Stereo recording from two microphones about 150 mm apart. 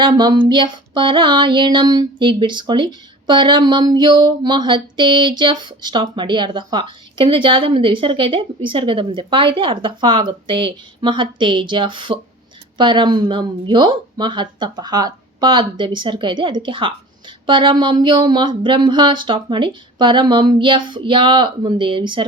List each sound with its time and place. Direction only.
0.0 s speech: 30° right (ahead or behind)